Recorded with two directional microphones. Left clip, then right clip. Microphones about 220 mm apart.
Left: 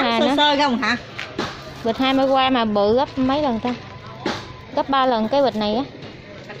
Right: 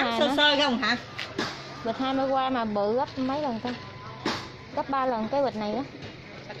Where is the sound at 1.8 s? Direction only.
15° left (ahead or behind).